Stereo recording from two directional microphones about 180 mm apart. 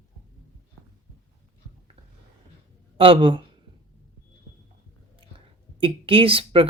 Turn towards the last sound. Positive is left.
turn(degrees=-30)  # may be behind; listen again after turning